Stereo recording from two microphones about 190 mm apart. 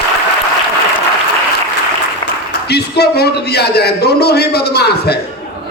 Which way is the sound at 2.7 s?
60° left (ahead or behind).